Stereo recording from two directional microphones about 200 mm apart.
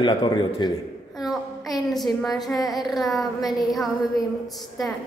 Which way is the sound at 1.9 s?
Centre (ahead or behind).